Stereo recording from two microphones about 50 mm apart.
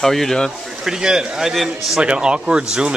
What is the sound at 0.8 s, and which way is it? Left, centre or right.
Speech, centre.